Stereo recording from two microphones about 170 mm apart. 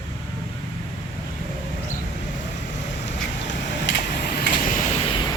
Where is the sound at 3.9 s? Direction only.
65° left (ahead or behind).